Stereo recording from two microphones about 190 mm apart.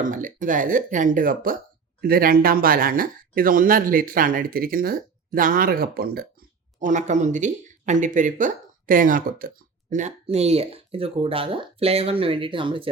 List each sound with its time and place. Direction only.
0.0 s speech: 45° right (ahead or behind)
6.7 s speech: 40° right (ahead or behind)